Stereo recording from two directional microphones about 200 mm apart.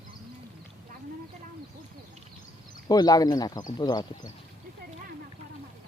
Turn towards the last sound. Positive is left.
turn(degrees=20)  # may be behind; listen again after turning